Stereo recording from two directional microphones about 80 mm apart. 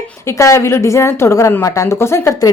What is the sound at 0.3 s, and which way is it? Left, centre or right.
A woman's voice, left.